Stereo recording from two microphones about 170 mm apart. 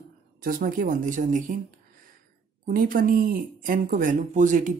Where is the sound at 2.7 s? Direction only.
55° right (ahead or behind).